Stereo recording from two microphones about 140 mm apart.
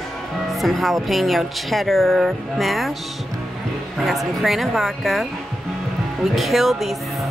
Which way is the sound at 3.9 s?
Centre (ahead or behind).